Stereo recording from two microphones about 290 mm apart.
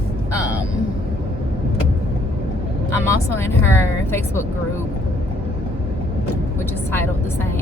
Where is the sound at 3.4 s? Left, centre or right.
Centre.